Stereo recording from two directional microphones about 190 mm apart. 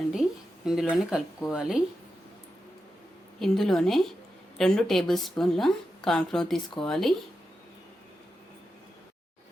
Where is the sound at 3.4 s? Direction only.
Centre (ahead or behind).